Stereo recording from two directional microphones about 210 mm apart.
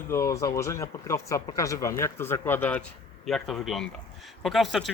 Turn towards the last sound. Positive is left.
turn(degrees=0)  # may be behind; listen again after turning